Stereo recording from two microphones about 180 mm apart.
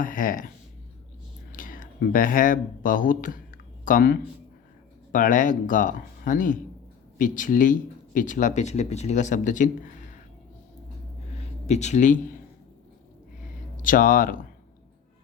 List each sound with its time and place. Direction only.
0.0 s a sound: 50° left (ahead or behind)
1.5 s speech: 50° left (ahead or behind)
11.3 s speech: 40° left (ahead or behind)
13.8 s speech: 50° left (ahead or behind)